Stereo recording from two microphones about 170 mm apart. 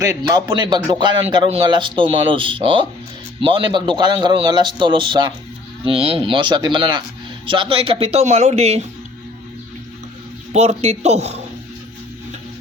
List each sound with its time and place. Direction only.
0.0 s a man's voice: 20° right (ahead or behind); by 8.9 s 40° right (ahead or behind)
10.5 s speech: 40° right (ahead or behind)